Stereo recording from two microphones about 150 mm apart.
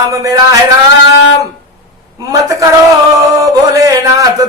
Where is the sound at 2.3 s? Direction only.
20° right (ahead or behind).